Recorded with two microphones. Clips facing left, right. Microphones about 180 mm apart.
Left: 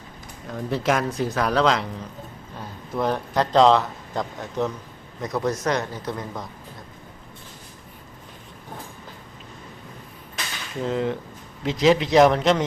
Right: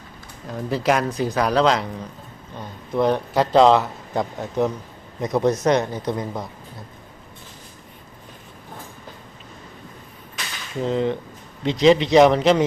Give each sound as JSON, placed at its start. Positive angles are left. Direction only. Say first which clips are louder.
{"t": 0.4, "sound": "a man's voice", "louder": "right 2 dB", "side_deg": 0}
{"t": 10.8, "sound": "speech", "louder": "right 3 dB", "side_deg": 0}